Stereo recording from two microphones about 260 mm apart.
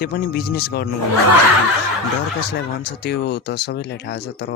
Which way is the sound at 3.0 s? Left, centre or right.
Left.